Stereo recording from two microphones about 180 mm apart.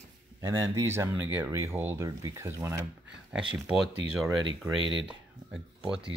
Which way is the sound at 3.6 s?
Centre (ahead or behind).